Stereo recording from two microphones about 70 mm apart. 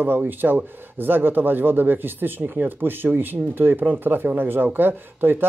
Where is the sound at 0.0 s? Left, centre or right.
Right.